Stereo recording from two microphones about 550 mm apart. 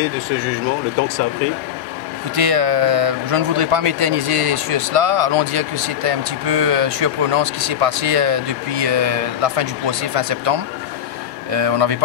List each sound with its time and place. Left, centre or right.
2.3 s a man's voice: right